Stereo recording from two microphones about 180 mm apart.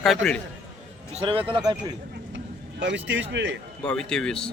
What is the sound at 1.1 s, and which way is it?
Speech, 30° right (ahead or behind).